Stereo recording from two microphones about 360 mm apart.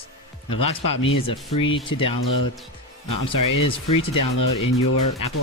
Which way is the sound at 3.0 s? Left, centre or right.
Left.